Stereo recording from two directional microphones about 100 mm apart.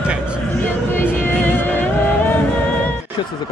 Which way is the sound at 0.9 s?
20° left (ahead or behind).